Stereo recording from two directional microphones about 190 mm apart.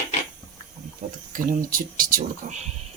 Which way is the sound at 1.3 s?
45° right (ahead or behind).